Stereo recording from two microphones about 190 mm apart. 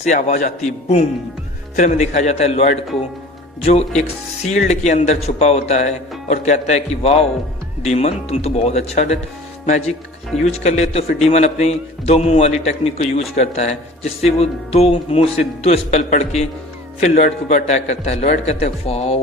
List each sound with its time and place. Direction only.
0.0 s a man's voice: 40° left (ahead or behind)